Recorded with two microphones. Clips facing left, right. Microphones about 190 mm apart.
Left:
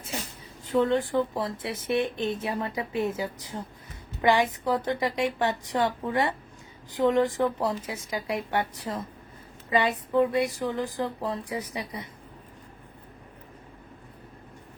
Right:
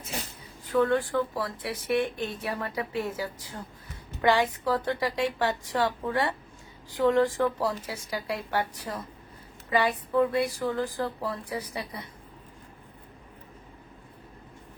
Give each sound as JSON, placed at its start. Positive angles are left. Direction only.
{"t": 0.6, "sound": "speech", "side_deg": 20}